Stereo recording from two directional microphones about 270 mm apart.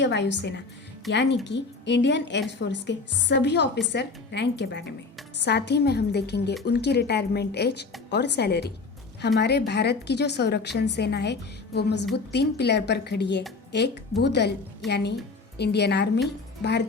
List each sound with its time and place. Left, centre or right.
0.0 s a woman's voice: left